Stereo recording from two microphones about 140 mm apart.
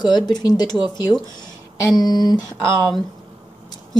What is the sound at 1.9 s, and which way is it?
Speech, 30° left (ahead or behind).